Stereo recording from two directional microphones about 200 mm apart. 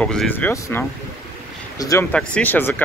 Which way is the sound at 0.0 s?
5° left (ahead or behind).